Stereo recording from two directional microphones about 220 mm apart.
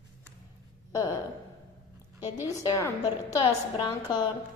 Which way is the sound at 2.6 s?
15° left (ahead or behind).